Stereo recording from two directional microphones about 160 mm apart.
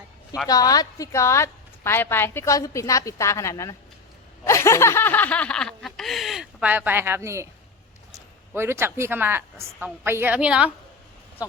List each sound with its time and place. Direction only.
0.4 s a woman's voice: 25° left (ahead or behind)
4.4 s snicker: 20° left (ahead or behind); by 7.4 s 15° right (ahead or behind)
8.1 s speech: 15° right (ahead or behind)